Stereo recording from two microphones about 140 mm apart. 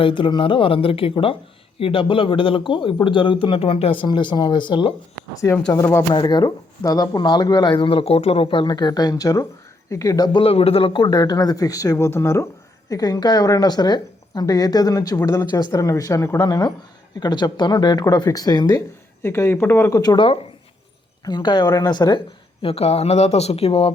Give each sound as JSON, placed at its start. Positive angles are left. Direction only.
{"t": 0.0, "sound": "a man's voice", "side_deg": 35}
{"t": 5.7, "sound": "a woman's voice", "side_deg": 20}
{"t": 6.1, "sound": "a man's voice", "side_deg": 30}
{"t": 10.4, "sound": "a woman's voice", "side_deg": 45}
{"t": 20.0, "sound": "a man's voice", "side_deg": 30}
{"t": 21.2, "sound": "a man's voice", "side_deg": 30}
{"t": 22.6, "sound": "speech", "side_deg": 45}